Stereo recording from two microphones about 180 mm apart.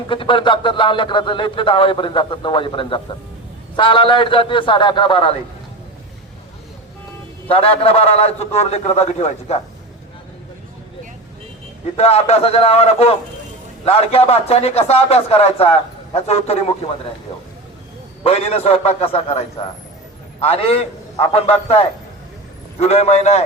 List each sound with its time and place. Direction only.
0.1 s speech: 30° left (ahead or behind)
7.4 s a man's voice: 30° left (ahead or behind)
11.9 s a man's voice: 35° left (ahead or behind)
18.2 s a man's voice: 35° left (ahead or behind)